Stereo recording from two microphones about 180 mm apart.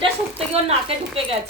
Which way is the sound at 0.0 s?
35° right (ahead or behind).